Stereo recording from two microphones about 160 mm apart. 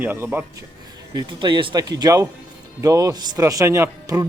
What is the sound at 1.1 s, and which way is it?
A man's voice, 30° right (ahead or behind).